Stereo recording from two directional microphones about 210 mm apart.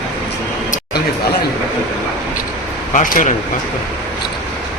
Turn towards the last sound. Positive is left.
turn(degrees=40)  # may be behind; listen again after turning